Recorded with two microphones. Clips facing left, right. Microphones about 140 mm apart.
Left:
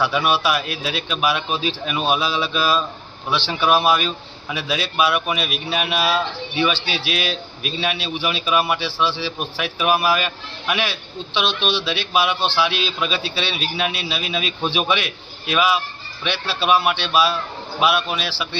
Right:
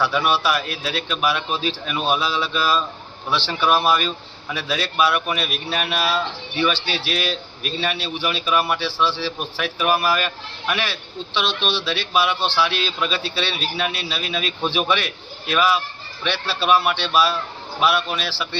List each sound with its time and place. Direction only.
0.0 s a man's voice: 10° left (ahead or behind)
6.7 s speech: 35° right (ahead or behind)
7.0 s a man's voice: 10° left (ahead or behind)